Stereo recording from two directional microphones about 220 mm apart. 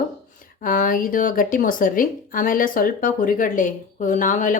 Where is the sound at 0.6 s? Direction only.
40° left (ahead or behind).